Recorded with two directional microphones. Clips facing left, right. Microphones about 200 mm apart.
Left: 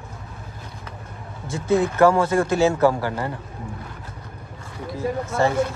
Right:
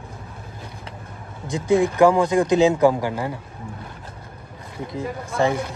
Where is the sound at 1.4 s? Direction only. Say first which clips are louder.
Right 2 dB; 15° right (ahead or behind).